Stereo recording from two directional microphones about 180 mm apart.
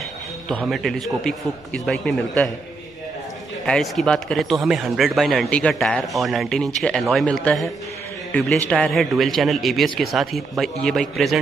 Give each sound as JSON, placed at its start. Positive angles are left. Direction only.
{"t": 0.5, "sound": "speech", "side_deg": 5}
{"t": 3.6, "sound": "a man's voice", "side_deg": 0}